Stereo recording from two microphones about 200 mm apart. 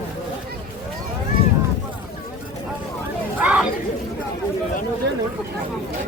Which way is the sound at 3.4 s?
10° right (ahead or behind).